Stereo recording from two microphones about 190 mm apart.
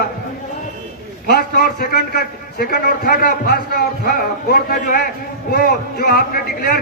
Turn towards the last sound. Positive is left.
turn(degrees=55)  # may be behind; listen again after turning